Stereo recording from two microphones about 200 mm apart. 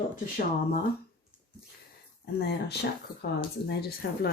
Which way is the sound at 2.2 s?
55° left (ahead or behind).